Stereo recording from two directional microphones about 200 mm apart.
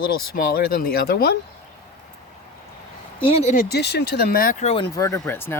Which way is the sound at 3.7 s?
55° left (ahead or behind).